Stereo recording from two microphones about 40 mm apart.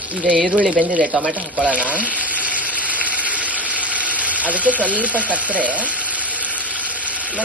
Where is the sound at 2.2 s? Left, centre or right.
Right.